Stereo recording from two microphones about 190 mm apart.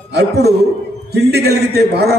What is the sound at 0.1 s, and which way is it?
A man's voice, 60° right (ahead or behind).